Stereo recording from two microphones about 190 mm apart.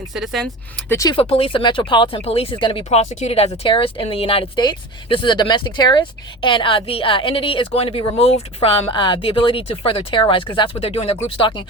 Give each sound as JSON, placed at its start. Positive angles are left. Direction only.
{"t": 0.1, "sound": "speech", "side_deg": 0}
{"t": 0.9, "sound": "speech", "side_deg": 20}
{"t": 1.2, "sound": "speech", "side_deg": 30}